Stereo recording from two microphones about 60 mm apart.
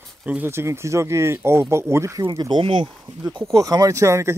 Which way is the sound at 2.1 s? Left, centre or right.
Right.